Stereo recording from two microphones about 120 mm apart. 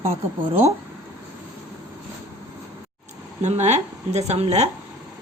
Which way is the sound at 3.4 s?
70° right (ahead or behind).